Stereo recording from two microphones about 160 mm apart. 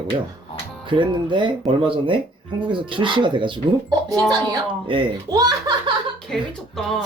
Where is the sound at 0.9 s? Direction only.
30° right (ahead or behind).